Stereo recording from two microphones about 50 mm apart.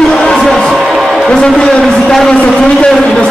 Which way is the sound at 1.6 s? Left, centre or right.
Centre.